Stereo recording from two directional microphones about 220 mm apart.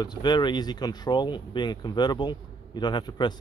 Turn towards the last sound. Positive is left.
turn(degrees=20)  # may be behind; listen again after turning